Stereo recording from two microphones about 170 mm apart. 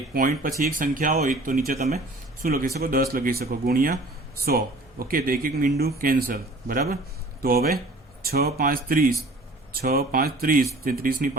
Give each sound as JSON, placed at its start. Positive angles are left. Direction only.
{"t": 0.1, "sound": "a man's voice", "side_deg": -55}
{"t": 2.4, "sound": "a man's voice", "side_deg": -60}